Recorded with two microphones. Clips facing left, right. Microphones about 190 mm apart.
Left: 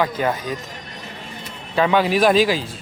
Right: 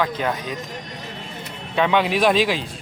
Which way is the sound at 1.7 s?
Centre (ahead or behind).